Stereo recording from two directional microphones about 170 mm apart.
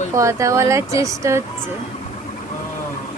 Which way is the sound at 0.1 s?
20° right (ahead or behind).